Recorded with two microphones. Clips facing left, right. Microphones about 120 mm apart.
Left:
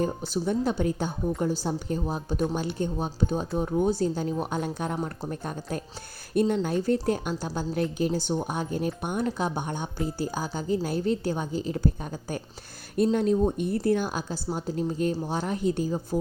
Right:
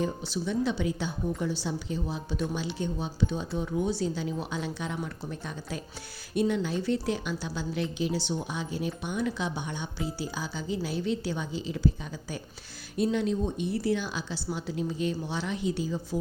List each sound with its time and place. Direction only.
0.0 s a woman's voice: 45° left (ahead or behind)
13.0 s a woman's voice: 50° left (ahead or behind)